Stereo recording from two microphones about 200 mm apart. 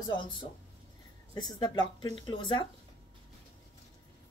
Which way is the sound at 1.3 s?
20° left (ahead or behind).